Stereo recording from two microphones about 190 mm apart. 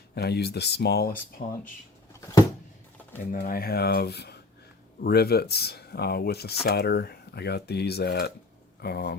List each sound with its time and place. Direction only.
0.1 s speech: 55° left (ahead or behind)
3.3 s speech: 50° left (ahead or behind)